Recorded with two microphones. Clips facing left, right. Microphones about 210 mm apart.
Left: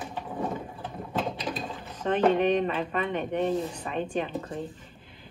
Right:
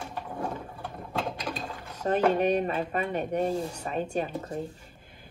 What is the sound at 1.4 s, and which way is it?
Mechanisms, centre (ahead or behind).